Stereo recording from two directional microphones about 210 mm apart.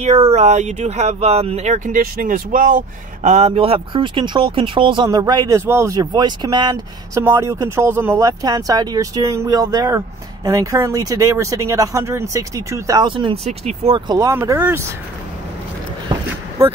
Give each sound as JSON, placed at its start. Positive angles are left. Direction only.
{"t": 0.3, "sound": "speech", "side_deg": -30}